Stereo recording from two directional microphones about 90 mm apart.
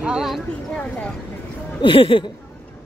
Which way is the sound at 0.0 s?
5° right (ahead or behind).